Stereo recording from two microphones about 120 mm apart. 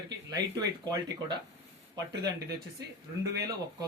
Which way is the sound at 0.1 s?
30° right (ahead or behind).